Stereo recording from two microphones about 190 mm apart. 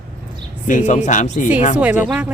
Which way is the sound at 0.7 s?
40° left (ahead or behind).